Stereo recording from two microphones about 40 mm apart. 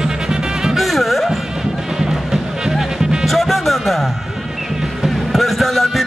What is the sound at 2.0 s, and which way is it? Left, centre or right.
Music, centre.